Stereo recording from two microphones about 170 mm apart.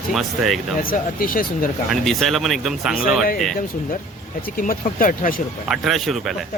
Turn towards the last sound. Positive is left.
turn(degrees=0)  # may be behind; listen again after turning